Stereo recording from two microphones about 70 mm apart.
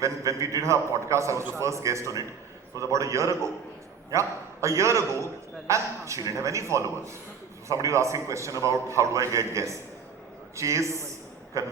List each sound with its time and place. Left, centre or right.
0.0 s a man's voice: right